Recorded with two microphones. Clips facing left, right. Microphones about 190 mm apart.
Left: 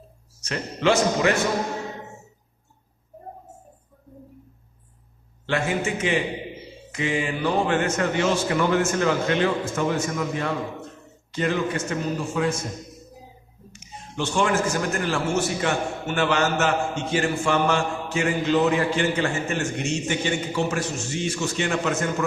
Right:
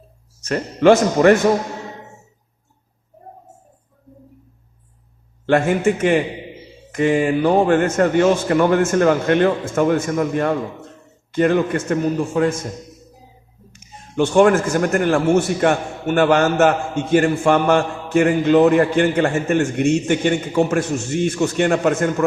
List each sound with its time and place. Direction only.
0.4 s a man's voice: 50° right (ahead or behind)
5.5 s a man's voice: 55° right (ahead or behind)
13.7 s a man's voice: 55° right (ahead or behind)